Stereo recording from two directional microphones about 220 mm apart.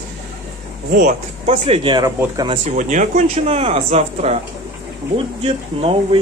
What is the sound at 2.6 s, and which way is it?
Speech, 35° right (ahead or behind).